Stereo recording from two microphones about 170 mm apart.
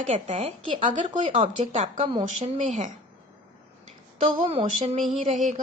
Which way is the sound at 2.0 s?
35° right (ahead or behind).